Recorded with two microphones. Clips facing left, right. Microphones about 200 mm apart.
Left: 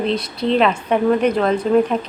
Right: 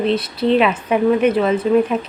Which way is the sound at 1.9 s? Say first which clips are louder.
Right 1 dB; 35° left (ahead or behind).